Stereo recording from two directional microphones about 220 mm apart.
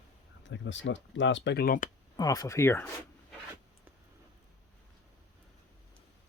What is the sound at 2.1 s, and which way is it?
Speech, 15° left (ahead or behind).